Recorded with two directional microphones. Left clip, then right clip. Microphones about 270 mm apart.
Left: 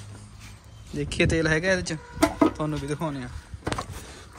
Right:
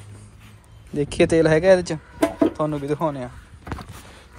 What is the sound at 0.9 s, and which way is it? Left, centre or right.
Speech, centre.